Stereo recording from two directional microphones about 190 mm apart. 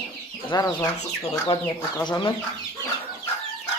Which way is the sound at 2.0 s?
20° left (ahead or behind).